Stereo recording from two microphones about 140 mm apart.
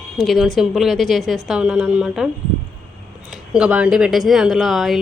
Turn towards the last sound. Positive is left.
turn(degrees=0)  # may be behind; listen again after turning